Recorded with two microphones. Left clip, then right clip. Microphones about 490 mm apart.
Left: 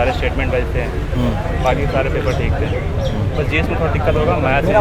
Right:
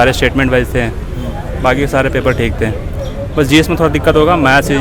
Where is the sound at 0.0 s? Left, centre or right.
Right.